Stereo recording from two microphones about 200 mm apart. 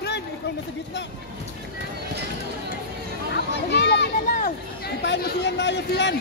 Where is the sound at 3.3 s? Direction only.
55° left (ahead or behind).